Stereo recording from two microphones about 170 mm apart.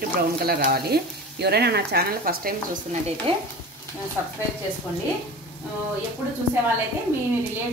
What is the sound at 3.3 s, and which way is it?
Stir, 30° right (ahead or behind).